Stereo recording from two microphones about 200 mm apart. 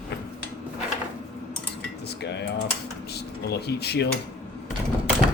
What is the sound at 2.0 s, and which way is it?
Cutlery, 55° left (ahead or behind).